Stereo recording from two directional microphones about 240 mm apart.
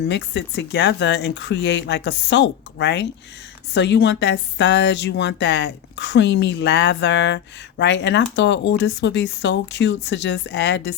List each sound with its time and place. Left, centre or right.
0.1 s speech: left